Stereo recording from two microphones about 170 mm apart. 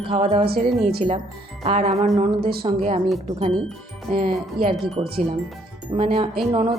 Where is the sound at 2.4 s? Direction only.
65° right (ahead or behind).